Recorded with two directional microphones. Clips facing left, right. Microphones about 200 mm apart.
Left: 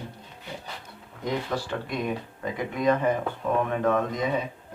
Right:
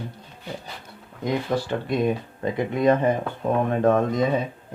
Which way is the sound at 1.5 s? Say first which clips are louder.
Right 6 dB; 30° right (ahead or behind).